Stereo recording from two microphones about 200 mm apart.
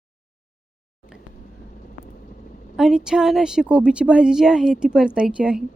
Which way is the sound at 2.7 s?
Centre (ahead or behind).